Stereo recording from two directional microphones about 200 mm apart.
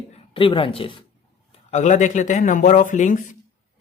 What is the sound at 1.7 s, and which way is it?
Speech, 35° left (ahead or behind).